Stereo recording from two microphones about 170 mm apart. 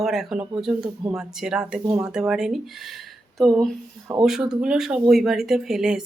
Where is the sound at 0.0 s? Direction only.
Centre (ahead or behind).